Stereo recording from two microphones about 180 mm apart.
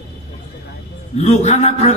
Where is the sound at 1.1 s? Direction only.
35° left (ahead or behind).